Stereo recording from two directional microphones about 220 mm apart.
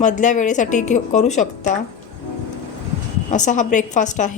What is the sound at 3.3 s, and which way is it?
Speech, 35° left (ahead or behind).